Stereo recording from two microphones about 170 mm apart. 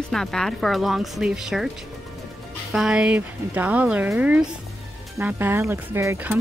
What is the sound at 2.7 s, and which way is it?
Speech, 5° right (ahead or behind).